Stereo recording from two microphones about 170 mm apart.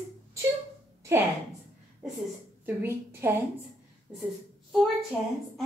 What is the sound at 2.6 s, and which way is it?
Speech, 15° right (ahead or behind).